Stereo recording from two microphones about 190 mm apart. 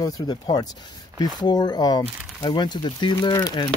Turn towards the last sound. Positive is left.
turn(degrees=20)  # may be behind; listen again after turning